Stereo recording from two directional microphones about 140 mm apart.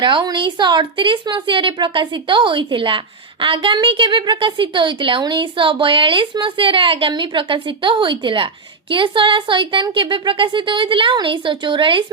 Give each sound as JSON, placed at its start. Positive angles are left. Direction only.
{"t": 0.0, "sound": "a woman's voice", "side_deg": -35}